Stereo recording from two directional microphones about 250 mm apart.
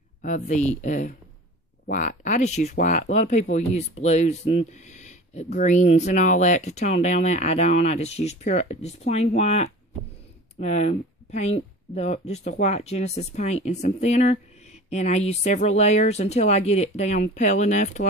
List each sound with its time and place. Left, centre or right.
0.2 s speech: left